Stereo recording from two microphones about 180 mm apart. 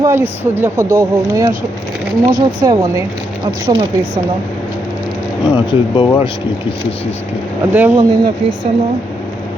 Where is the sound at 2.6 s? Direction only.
20° right (ahead or behind).